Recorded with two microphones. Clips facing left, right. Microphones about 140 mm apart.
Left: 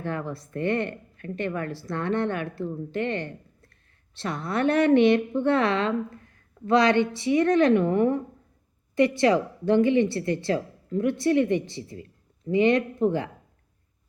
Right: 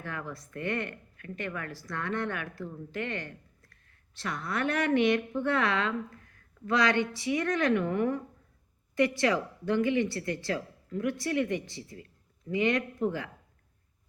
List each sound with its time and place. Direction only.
0.0 s speech: 30° left (ahead or behind)